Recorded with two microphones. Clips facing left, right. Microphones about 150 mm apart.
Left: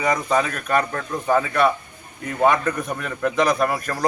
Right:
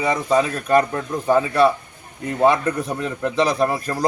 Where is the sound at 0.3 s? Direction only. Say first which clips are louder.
Right 4 dB; 30° right (ahead or behind).